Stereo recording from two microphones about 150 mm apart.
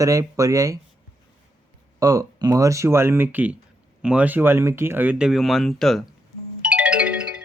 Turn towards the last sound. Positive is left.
turn(degrees=-5)  # may be behind; listen again after turning